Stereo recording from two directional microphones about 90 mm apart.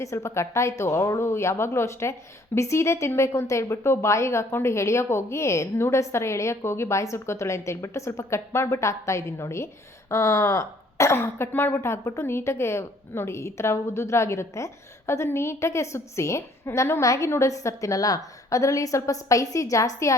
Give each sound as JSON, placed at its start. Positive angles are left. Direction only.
{"t": 0.0, "sound": "speech", "side_deg": 35}